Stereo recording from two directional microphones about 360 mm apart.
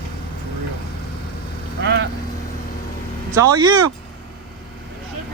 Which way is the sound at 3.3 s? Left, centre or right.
Centre.